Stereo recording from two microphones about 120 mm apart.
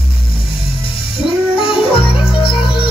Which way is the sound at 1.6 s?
50° left (ahead or behind).